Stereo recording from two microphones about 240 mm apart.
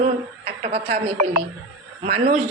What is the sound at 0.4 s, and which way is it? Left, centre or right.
A woman's voice, right.